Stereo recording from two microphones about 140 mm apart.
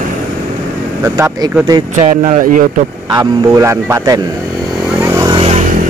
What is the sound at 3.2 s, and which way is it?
Speech, 20° right (ahead or behind).